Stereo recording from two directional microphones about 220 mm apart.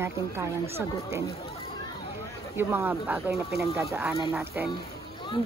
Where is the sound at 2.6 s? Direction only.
10° right (ahead or behind).